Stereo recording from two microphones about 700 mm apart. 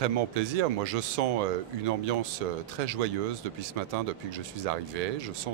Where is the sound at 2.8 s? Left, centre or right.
Right.